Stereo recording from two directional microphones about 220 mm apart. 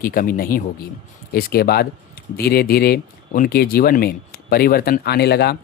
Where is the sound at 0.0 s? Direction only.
40° left (ahead or behind).